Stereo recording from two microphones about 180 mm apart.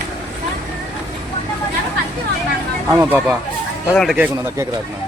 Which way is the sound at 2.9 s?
10° right (ahead or behind).